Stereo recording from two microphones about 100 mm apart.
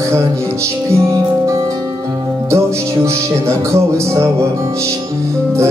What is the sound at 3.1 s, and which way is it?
Music, 30° right (ahead or behind).